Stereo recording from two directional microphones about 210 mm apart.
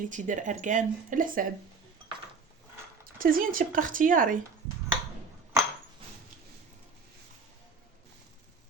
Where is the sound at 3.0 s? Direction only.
45° right (ahead or behind).